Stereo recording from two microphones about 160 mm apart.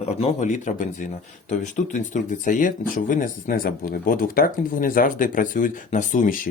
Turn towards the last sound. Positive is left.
turn(degrees=55)  # may be behind; listen again after turning